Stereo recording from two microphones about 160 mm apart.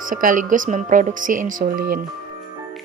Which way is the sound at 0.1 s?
60° right (ahead or behind).